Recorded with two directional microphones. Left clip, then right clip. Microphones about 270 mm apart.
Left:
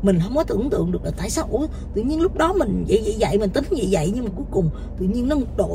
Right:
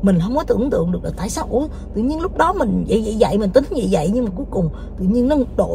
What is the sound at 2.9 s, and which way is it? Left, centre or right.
Speech, right.